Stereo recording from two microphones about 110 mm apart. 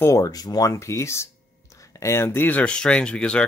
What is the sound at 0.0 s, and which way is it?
Speech, 30° left (ahead or behind).